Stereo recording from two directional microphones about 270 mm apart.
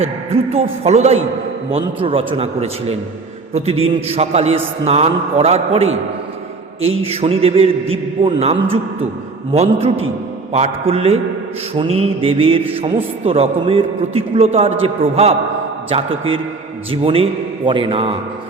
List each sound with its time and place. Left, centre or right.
0.0 s a man's voice: right
16.9 s a man's voice: right